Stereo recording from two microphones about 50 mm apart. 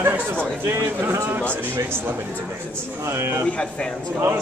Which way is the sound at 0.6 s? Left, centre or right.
Right.